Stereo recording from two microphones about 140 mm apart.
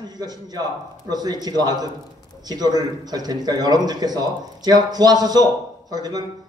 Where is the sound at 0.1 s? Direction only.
30° right (ahead or behind).